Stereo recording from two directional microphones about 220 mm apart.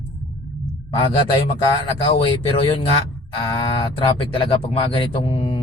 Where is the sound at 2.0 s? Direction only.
25° left (ahead or behind).